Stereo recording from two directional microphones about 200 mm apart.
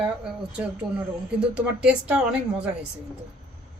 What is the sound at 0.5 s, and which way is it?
A woman's voice, 5° right (ahead or behind).